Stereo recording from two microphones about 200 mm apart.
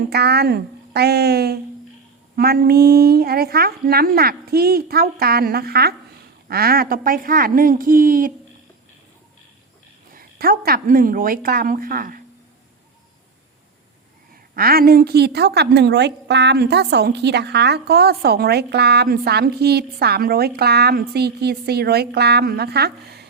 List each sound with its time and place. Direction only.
0.1 s a woman's voice: 55° right (ahead or behind)
10.2 s a woman's voice: 45° right (ahead or behind)
14.5 s a woman's voice: 45° right (ahead or behind)